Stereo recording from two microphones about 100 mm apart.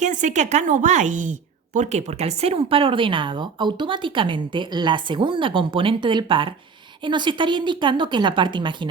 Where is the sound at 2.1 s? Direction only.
90° right.